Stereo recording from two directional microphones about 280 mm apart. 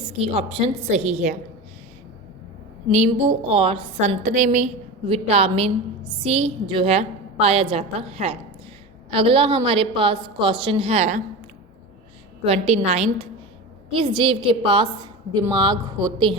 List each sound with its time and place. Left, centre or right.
0.0 s a woman's voice: centre
2.9 s a woman's voice: right
12.5 s a woman's voice: right